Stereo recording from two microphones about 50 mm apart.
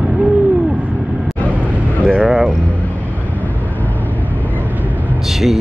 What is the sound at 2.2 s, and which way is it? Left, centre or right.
Vehicle, centre.